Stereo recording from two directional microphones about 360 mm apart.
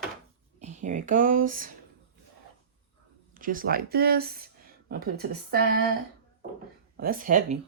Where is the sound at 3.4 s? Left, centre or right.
Right.